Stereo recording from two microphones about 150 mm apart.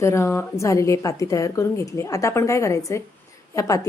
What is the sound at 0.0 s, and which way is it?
A woman's voice, 20° left (ahead or behind).